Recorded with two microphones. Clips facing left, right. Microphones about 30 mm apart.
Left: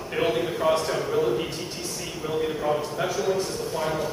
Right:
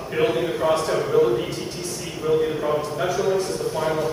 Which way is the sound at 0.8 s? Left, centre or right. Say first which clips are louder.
Right 5 dB; centre.